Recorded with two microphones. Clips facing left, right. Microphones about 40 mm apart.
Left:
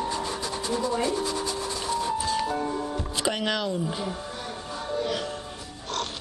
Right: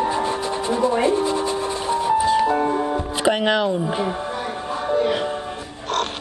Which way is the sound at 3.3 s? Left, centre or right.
Right.